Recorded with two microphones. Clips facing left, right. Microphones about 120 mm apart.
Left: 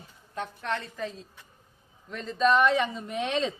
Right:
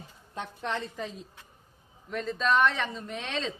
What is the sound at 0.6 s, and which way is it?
Speech, 15° right (ahead or behind).